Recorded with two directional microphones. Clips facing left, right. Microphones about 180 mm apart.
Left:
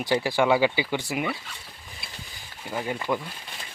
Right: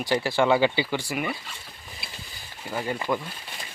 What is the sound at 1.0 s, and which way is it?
Speech, 20° left (ahead or behind).